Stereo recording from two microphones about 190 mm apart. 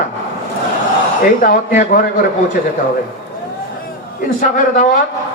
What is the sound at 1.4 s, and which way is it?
Speech, 45° left (ahead or behind).